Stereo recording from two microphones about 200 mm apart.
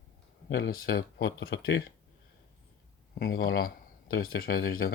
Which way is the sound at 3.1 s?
50° left (ahead or behind).